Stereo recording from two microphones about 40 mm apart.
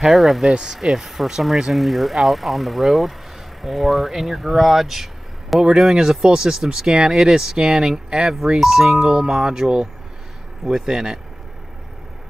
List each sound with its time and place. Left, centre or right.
0.0 s speech: centre
0.4 s speech: centre